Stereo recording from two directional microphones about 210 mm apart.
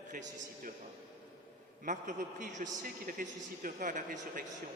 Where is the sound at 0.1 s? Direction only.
35° right (ahead or behind).